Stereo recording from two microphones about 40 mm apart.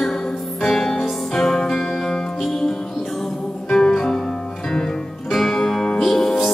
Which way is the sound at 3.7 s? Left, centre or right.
Centre.